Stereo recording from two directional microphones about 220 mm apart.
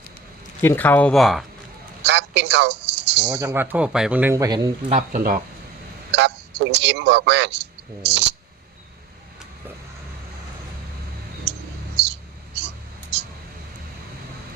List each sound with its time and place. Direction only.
0.6 s speech: 10° left (ahead or behind)
2.0 s a sound: 50° right (ahead or behind)
3.4 s a man's voice: 10° right (ahead or behind)
4.9 s speech: 40° right (ahead or behind)
6.1 s a man's voice: 50° right (ahead or behind)
11.5 s a sound: 50° right (ahead or behind)
12.5 s whispering: 50° right (ahead or behind)